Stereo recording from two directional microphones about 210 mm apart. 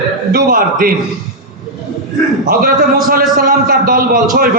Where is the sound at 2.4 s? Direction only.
40° right (ahead or behind).